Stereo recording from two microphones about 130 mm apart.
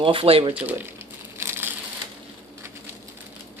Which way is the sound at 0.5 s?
15° right (ahead or behind).